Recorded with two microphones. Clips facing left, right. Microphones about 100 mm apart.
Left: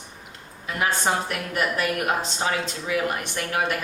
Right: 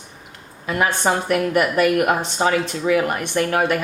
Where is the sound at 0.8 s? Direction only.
55° right (ahead or behind).